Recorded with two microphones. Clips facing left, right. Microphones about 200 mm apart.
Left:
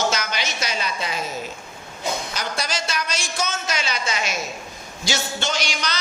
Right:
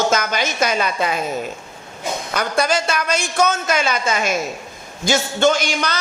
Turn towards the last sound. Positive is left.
turn(degrees=-50)  # may be behind; listen again after turning